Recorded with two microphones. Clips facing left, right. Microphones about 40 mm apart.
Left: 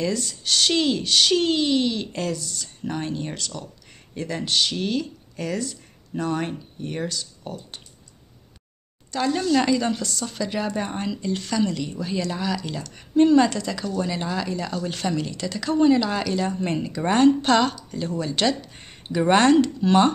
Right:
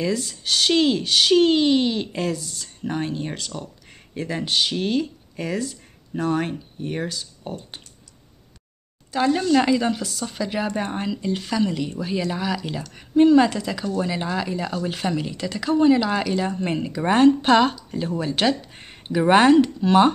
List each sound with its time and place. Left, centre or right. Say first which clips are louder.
0.0 s speech: right 1 dB; centre
9.1 s speech: right 3 dB; centre